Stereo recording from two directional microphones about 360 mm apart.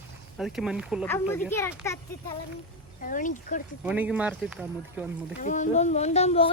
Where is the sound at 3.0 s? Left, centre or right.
Left.